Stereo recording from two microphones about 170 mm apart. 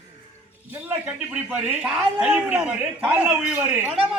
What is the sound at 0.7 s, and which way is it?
Speech, 10° right (ahead or behind).